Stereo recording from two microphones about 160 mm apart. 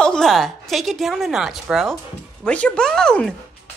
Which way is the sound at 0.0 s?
5° left (ahead or behind).